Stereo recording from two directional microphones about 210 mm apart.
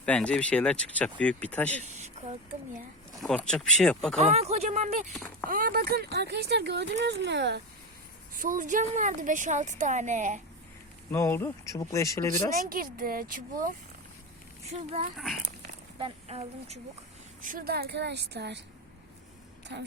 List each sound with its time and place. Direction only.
0.0 s speech: 5° left (ahead or behind)
1.7 s a sound: 35° right (ahead or behind)
3.2 s speech: centre (ahead or behind)
4.2 s a woman's voice: 30° right (ahead or behind)
5.1 s speech: 5° left (ahead or behind)
5.5 s speech: 40° right (ahead or behind)
8.4 s a woman's voice: 40° right (ahead or behind)
11.1 s speech: 10° left (ahead or behind)
12.6 s a woman's voice: 45° right (ahead or behind)
15.1 s speech: centre (ahead or behind)
16.0 s speech: 25° right (ahead or behind)
17.4 s speech: 45° right (ahead or behind)
19.7 s speech: 55° right (ahead or behind)